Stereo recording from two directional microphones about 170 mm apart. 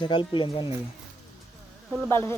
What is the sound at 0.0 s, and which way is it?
Speech, 30° left (ahead or behind).